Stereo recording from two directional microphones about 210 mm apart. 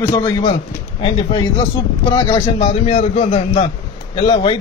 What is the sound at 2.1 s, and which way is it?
A man's voice, 25° left (ahead or behind).